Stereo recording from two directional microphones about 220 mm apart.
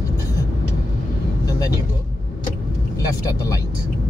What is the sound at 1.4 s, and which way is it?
Vehicle, 15° left (ahead or behind).